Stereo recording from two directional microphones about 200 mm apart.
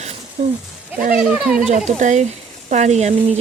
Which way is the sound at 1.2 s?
5° right (ahead or behind).